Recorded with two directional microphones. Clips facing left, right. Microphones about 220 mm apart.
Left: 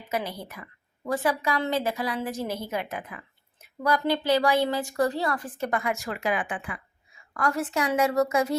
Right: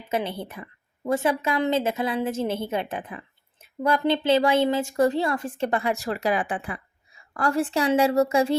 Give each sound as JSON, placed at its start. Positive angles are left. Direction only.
{"t": 0.1, "sound": "a woman's voice", "side_deg": -25}